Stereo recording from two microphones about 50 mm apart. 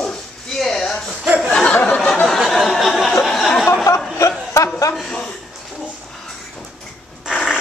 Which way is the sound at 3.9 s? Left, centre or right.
Left.